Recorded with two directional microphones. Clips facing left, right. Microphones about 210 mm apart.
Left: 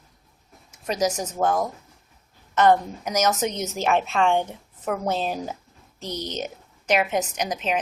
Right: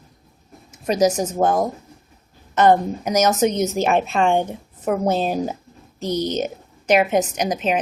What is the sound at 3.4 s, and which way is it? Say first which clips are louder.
Speech: right 8 dB; 50° right (ahead or behind).